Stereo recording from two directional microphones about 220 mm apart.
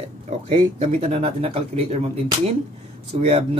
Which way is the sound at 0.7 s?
25° right (ahead or behind).